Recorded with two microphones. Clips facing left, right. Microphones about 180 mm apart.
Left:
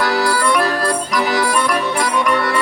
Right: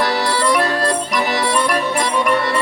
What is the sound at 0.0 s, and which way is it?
Music, 25° right (ahead or behind).